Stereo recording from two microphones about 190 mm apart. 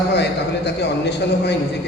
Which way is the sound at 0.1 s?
60° left (ahead or behind).